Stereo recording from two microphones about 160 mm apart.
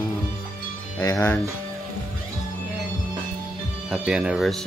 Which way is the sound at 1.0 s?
15° left (ahead or behind).